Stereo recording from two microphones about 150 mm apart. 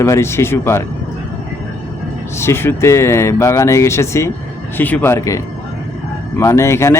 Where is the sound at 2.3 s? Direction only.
15° left (ahead or behind).